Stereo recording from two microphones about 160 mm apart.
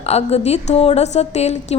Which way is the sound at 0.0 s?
40° left (ahead or behind).